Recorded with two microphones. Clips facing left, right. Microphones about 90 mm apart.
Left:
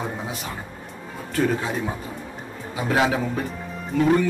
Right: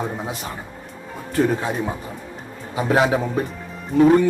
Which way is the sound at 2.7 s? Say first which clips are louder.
Right 3 dB; 25° right (ahead or behind).